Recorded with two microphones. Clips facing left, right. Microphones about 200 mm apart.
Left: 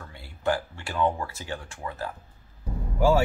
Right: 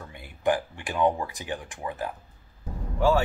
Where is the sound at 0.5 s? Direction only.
15° right (ahead or behind).